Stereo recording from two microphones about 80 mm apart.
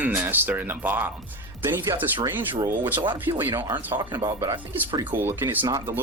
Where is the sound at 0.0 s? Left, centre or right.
Right.